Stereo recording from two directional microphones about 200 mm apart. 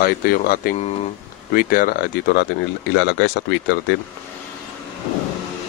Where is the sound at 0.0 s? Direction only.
45° left (ahead or behind).